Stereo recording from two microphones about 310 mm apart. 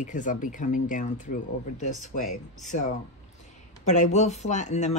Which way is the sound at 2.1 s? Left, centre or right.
Left.